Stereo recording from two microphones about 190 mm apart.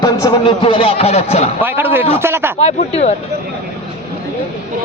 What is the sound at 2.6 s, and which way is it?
Speech, 35° left (ahead or behind).